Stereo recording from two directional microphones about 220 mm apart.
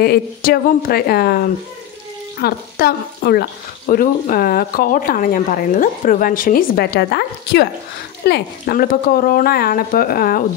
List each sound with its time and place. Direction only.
0.0 s speech: 45° left (ahead or behind)
2.3 s speech: 45° left (ahead or behind)